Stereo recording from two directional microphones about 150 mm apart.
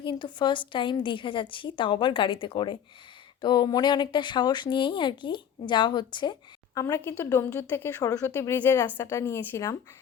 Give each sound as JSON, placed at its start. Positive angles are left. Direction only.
{"t": 0.0, "sound": "a woman's voice", "side_deg": 30}